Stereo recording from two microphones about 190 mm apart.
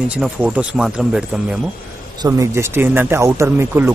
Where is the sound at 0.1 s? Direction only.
5° right (ahead or behind).